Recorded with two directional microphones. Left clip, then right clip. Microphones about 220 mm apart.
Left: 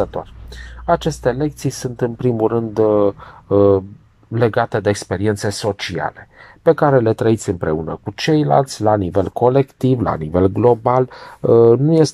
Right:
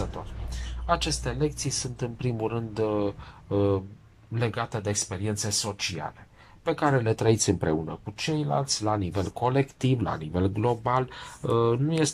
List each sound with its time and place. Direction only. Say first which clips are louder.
0.0 s speech: left 15 dB; 40° left (ahead or behind)
6.6 s speech: left 12 dB; 30° left (ahead or behind)
7.2 s speech: left 7 dB; 5° left (ahead or behind)
8.0 s speech: left 13 dB; 40° left (ahead or behind); by 12.1 s 25° left (ahead or behind)